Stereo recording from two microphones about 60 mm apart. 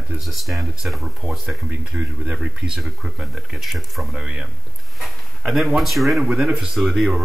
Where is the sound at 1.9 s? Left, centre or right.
Right; by 4.0 s centre.